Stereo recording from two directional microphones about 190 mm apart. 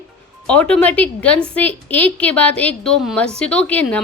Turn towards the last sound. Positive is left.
turn(degrees=5)  # may be behind; listen again after turning